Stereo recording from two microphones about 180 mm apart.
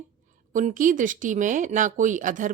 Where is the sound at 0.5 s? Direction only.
45° right (ahead or behind).